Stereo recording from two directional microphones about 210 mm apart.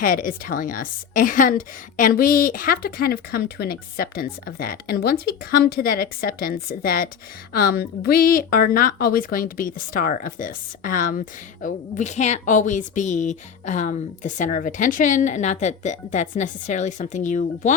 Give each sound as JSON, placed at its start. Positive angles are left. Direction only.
{"t": 0.0, "sound": "a woman's voice", "side_deg": 40}